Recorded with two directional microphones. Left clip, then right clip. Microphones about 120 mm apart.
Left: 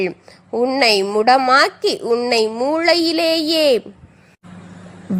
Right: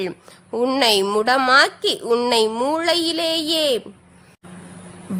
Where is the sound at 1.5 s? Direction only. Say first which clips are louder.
Left 1 dB; 25° left (ahead or behind).